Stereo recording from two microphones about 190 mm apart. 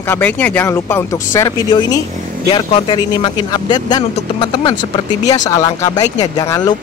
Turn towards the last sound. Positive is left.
turn(degrees=20)  # may be behind; listen again after turning